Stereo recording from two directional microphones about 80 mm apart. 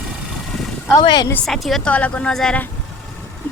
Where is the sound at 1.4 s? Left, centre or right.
Centre.